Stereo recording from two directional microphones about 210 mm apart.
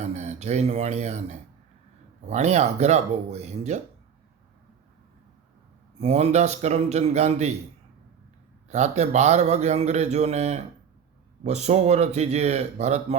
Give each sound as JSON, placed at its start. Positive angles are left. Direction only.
{"t": 0.0, "sound": "a man's voice", "side_deg": -35}
{"t": 6.0, "sound": "a man's voice", "side_deg": -30}
{"t": 8.7, "sound": "a man's voice", "side_deg": -35}